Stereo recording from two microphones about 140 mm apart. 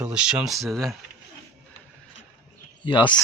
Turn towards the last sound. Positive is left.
turn(degrees=35)  # may be behind; listen again after turning